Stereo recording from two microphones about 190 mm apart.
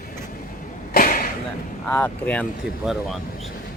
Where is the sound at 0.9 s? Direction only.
50° left (ahead or behind).